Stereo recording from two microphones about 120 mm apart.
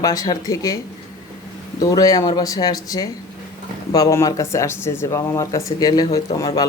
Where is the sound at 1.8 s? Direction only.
30° left (ahead or behind).